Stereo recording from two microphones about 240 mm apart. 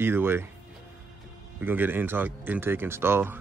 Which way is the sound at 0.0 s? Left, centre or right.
Centre.